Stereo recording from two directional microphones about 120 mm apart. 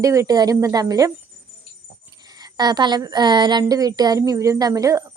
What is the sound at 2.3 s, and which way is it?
A woman's voice, 35° right (ahead or behind).